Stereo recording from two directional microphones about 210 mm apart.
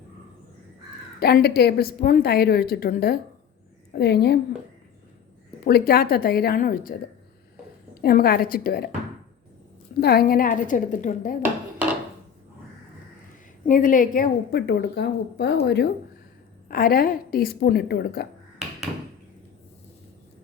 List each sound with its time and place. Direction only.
1.2 s a woman's voice: 50° left (ahead or behind)
5.6 s a woman's voice: 45° left (ahead or behind)
8.0 s a woman's voice: 45° left (ahead or behind)
10.0 s a woman's voice: 50° left (ahead or behind)
13.7 s a woman's voice: 40° left (ahead or behind)
14.7 s a woman's voice: 55° left (ahead or behind)